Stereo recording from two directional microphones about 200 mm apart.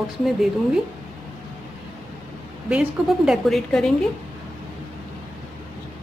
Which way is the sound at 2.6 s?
5° right (ahead or behind).